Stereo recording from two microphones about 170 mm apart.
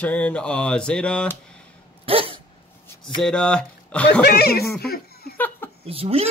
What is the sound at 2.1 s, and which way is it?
Dog, 35° right (ahead or behind).